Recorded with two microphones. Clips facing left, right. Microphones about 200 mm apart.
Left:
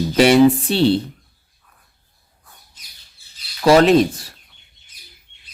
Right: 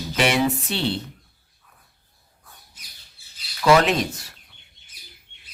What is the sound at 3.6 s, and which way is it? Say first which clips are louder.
Speech: left 6 dB; 35° left (ahead or behind).